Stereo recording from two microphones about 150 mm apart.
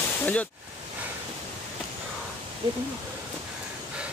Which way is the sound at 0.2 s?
10° left (ahead or behind).